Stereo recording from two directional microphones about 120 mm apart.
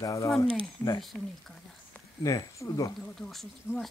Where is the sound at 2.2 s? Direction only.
30° left (ahead or behind).